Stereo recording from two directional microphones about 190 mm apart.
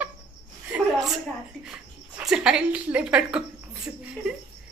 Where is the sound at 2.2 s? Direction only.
5° right (ahead or behind).